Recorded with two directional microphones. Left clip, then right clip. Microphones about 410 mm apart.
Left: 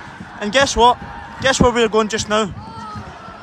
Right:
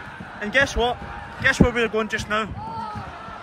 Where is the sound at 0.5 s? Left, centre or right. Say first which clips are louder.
Left 8 dB; centre.